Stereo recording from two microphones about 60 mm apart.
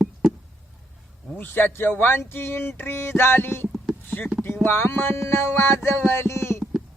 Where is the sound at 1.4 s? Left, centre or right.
Left.